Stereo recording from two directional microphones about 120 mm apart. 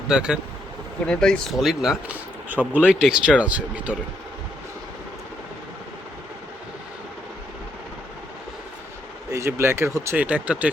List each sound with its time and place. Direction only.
0.1 s speech: 5° right (ahead or behind)
1.0 s speech: 5° left (ahead or behind); by 3.9 s 10° right (ahead or behind)
9.3 s speech: 20° right (ahead or behind)